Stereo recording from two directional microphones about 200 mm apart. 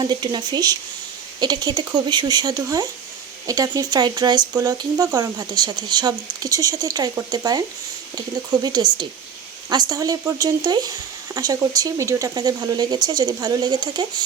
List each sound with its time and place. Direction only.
0.0 s speech: 20° right (ahead or behind)
8.6 s speech: 20° right (ahead or behind)